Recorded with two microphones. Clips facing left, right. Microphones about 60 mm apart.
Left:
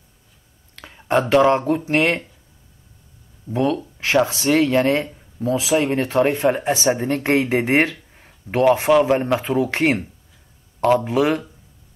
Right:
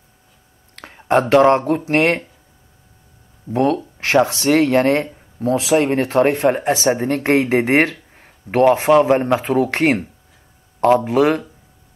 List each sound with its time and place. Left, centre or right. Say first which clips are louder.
0.7 s speech: right 3 dB; right
3.5 s speech: right 3 dB; right
6.4 s speech: right 2 dB; right
8.9 s speech: right 3 dB; right
9.4 s speech: right 3 dB; right